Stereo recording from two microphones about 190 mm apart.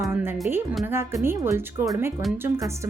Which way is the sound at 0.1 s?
10° right (ahead or behind).